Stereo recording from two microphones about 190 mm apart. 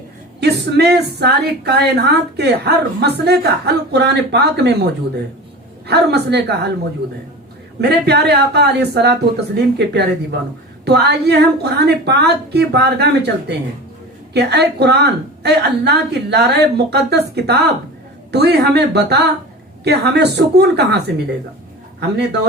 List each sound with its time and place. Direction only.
0.3 s speech: 60° right (ahead or behind)
7.8 s speech: 60° right (ahead or behind)
22.0 s speech: 65° right (ahead or behind)